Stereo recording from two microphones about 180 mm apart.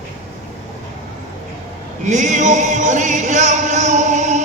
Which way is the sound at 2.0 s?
40° right (ahead or behind).